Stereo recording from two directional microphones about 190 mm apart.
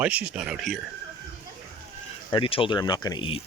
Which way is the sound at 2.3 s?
25° left (ahead or behind).